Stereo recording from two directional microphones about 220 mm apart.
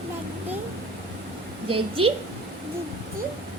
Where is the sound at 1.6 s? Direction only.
25° right (ahead or behind).